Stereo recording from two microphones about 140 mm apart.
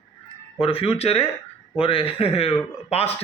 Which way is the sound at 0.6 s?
40° left (ahead or behind).